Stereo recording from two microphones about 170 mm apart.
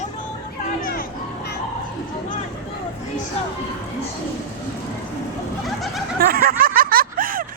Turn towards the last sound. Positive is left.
turn(degrees=-55)  # may be behind; listen again after turning